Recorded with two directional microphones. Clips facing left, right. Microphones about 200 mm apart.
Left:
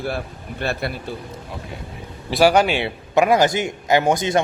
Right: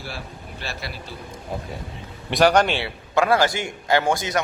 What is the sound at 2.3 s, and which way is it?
Speech, 5° left (ahead or behind).